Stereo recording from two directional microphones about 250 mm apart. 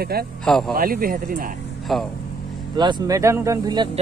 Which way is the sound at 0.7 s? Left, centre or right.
Right.